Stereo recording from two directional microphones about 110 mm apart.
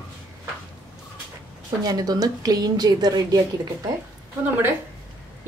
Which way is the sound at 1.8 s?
35° right (ahead or behind).